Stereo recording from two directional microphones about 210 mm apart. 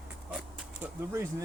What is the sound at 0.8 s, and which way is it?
Speech, 10° right (ahead or behind).